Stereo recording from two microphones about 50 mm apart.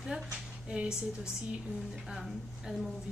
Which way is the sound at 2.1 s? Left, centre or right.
Centre.